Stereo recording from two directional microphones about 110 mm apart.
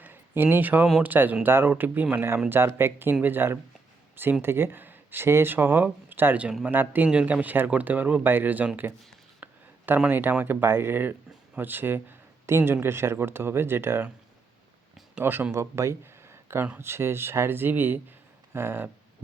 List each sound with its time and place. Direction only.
0.0 s a sound: 15° right (ahead or behind)
1.0 s speech: 15° right (ahead or behind)
15.2 s speech: 20° right (ahead or behind)